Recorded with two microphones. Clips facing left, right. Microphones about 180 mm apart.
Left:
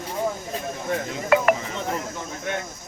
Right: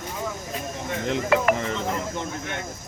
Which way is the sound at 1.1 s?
70° right (ahead or behind).